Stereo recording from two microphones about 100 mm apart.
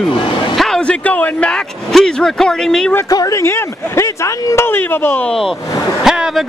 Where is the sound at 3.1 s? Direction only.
35° left (ahead or behind); by 5.3 s 20° left (ahead or behind).